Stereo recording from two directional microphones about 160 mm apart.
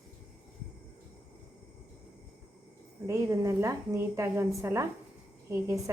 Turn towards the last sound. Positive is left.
turn(degrees=-20)  # may be behind; listen again after turning